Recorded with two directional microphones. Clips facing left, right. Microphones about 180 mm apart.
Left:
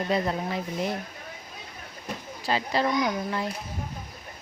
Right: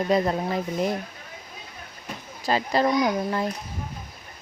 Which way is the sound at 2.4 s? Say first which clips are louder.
Right 4 dB; 45° right (ahead or behind).